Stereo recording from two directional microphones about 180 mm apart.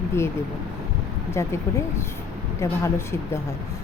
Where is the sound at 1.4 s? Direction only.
15° left (ahead or behind).